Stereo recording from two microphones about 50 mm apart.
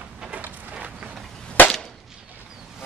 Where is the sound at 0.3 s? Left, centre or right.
Right.